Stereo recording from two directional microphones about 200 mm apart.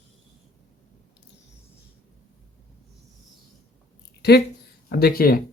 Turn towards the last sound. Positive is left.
turn(degrees=45)  # may be behind; listen again after turning